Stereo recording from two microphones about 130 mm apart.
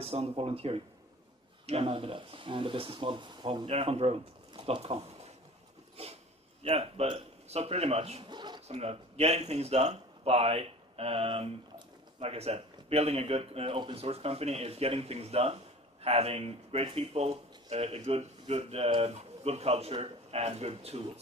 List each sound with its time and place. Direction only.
0.0 s speech: 50° right (ahead or behind)
3.7 s speech: 50° right (ahead or behind)
6.0 s a sound: 50° right (ahead or behind)
6.6 s speech: 50° right (ahead or behind)
8.3 s a sound: 35° right (ahead or behind)
8.6 s speech: 55° right (ahead or behind)